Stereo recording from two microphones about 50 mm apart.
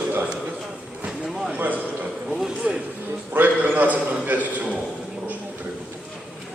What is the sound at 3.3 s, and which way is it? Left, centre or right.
A man's voice, right.